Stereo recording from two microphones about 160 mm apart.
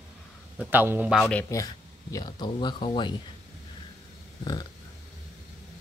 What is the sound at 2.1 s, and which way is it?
Speech, 25° left (ahead or behind).